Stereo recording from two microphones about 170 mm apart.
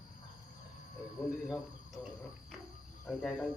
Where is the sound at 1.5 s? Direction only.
Centre (ahead or behind).